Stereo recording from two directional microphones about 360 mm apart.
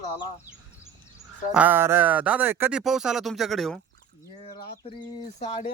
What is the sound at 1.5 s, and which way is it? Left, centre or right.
Speech, centre.